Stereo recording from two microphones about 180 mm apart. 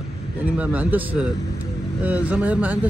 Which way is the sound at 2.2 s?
5° right (ahead or behind).